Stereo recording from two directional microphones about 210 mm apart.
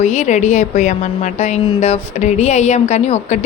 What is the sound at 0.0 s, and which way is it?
Speech, 35° left (ahead or behind).